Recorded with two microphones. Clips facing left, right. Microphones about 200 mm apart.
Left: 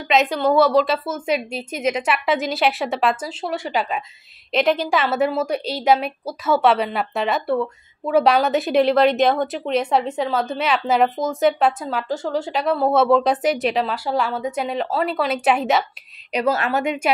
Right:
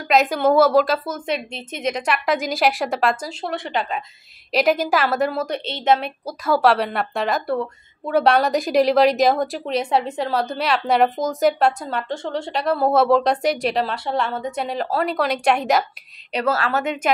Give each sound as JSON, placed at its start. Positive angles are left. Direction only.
{"t": 0.1, "sound": "a woman's voice", "side_deg": 0}
{"t": 4.5, "sound": "a woman's voice", "side_deg": 0}
{"t": 16.3, "sound": "a woman's voice", "side_deg": 15}